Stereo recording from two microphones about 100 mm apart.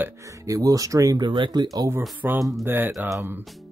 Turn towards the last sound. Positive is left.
turn(degrees=-20)  # may be behind; listen again after turning